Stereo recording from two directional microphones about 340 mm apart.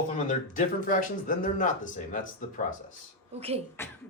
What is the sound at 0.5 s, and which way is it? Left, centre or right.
Speech, left.